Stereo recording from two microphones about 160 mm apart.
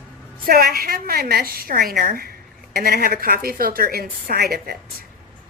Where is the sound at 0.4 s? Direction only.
70° right (ahead or behind).